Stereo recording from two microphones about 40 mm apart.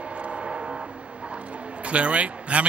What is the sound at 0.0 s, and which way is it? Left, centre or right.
Vehicle, right.